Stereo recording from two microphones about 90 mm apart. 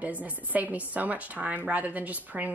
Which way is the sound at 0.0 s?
20° right (ahead or behind).